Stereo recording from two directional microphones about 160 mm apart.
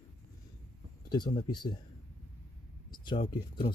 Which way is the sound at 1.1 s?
25° left (ahead or behind).